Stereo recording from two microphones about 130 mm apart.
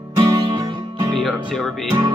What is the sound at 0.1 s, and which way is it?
Music, 30° right (ahead or behind).